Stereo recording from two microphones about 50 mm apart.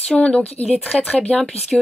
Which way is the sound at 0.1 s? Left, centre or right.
Left.